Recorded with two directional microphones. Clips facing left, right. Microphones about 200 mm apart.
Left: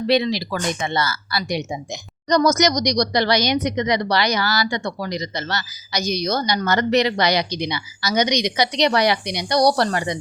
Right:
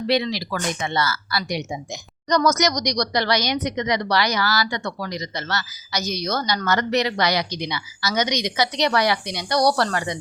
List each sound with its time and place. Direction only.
0.1 s speech: 25° left (ahead or behind)